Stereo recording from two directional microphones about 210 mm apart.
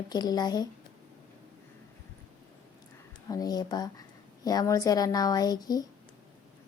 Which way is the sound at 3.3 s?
20° left (ahead or behind).